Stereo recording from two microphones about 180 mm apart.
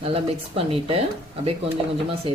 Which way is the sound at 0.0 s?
30° right (ahead or behind).